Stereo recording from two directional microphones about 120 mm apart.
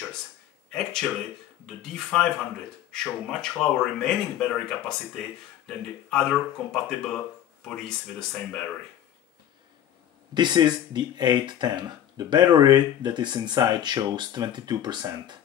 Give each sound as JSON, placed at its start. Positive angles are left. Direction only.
{"t": 0.7, "sound": "speech", "side_deg": 5}
{"t": 10.3, "sound": "speech", "side_deg": -40}